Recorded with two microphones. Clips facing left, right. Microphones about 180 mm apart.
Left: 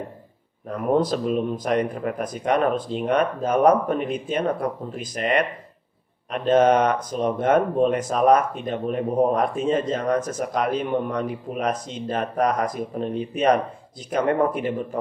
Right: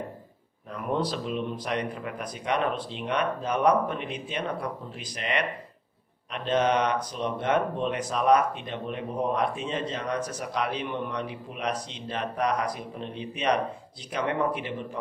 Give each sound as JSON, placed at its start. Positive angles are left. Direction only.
{"t": 0.7, "sound": "speech", "side_deg": 45}